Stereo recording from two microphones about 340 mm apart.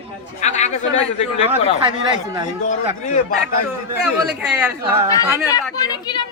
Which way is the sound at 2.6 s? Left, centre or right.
Left.